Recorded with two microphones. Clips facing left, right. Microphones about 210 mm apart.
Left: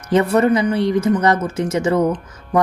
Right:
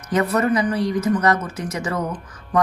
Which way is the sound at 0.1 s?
30° left (ahead or behind).